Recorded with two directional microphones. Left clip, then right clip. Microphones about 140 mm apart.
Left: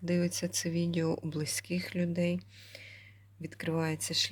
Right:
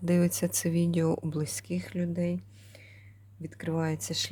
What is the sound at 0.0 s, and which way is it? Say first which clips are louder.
Speech: right 4 dB; 35° right (ahead or behind).